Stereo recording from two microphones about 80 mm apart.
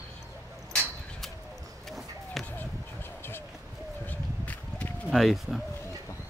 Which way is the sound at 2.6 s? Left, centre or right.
Left.